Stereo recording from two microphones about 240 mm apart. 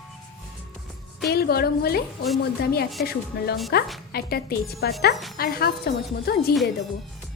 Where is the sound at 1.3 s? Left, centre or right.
Left.